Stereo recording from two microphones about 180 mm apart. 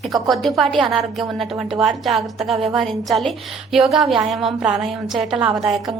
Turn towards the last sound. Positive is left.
turn(degrees=0)  # may be behind; listen again after turning